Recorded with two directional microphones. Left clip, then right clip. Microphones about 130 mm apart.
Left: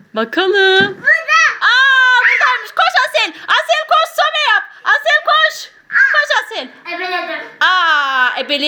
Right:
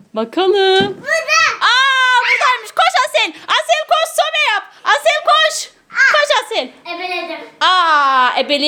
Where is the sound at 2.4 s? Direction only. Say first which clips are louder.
Even; 30° right (ahead or behind).